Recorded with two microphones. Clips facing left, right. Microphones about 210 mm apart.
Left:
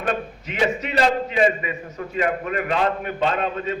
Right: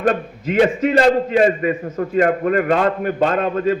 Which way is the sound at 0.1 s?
50° right (ahead or behind).